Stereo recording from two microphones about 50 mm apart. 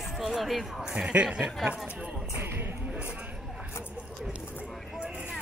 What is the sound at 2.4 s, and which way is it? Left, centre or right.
Speech, right.